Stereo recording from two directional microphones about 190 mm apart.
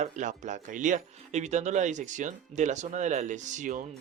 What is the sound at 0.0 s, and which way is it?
Speech, 40° right (ahead or behind).